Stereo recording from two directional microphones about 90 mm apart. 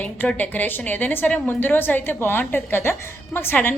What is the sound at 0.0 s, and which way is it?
A woman's voice, 15° left (ahead or behind).